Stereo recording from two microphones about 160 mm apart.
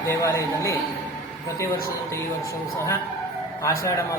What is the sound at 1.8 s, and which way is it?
A man's voice, 20° left (ahead or behind).